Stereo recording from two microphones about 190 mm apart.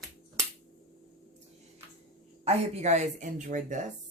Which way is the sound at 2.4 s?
35° right (ahead or behind).